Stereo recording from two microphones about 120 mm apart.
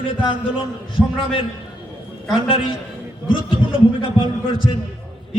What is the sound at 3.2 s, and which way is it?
A man's voice, 45° left (ahead or behind).